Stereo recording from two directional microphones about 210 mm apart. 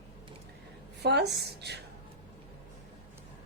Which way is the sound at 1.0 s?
50° right (ahead or behind).